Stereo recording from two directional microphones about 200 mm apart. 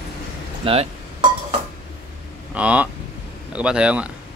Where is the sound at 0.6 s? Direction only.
30° right (ahead or behind).